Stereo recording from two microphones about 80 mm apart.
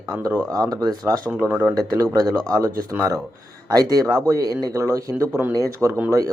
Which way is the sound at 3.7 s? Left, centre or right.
Right.